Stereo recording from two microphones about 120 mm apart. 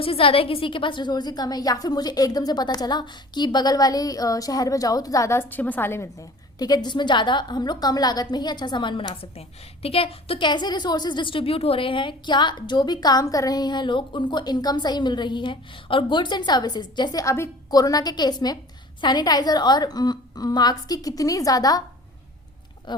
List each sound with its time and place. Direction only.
0.0 s a woman's voice: 50° left (ahead or behind)
9.8 s a woman's voice: 55° left (ahead or behind); by 21.8 s 30° left (ahead or behind)
22.9 s a woman's voice: 40° left (ahead or behind)